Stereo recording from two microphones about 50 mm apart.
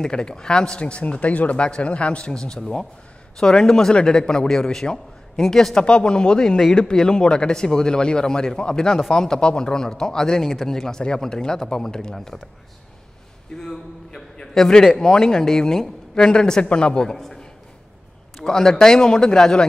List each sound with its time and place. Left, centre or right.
0.0 s speech: centre
2.3 s a woman's voice: centre
5.8 s a woman's voice: centre
13.6 s a man's voice: centre